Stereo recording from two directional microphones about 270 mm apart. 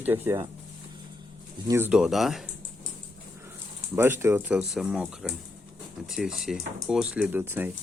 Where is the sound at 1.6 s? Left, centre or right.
Centre.